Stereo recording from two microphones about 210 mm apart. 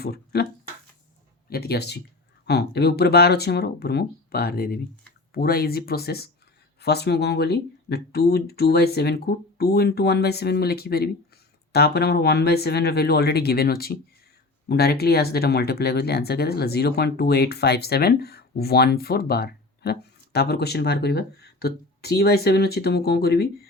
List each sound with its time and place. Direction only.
0.0 s speech: 50° left (ahead or behind)
1.5 s speech: 50° left (ahead or behind)